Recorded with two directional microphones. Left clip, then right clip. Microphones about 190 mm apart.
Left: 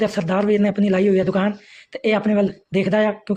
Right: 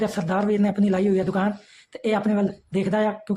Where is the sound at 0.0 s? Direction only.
15° left (ahead or behind).